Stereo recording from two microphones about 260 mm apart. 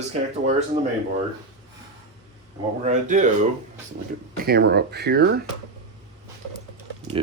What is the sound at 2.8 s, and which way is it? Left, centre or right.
Speech, right.